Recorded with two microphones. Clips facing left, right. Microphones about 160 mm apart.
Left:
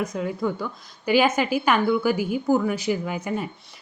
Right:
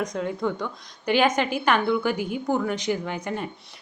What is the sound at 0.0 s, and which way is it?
A woman's voice, 5° left (ahead or behind).